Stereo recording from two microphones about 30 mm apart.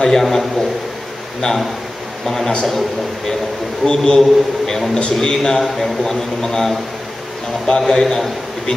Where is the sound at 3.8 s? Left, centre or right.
Centre.